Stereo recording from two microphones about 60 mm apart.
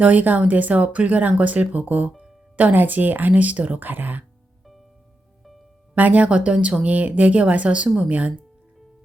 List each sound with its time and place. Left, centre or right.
0.0 s speech: right
5.9 s speech: right